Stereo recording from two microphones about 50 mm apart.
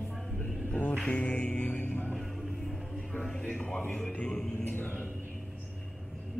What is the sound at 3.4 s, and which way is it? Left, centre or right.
Speech, centre.